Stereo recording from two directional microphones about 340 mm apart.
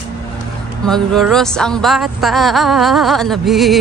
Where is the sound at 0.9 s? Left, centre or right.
Centre.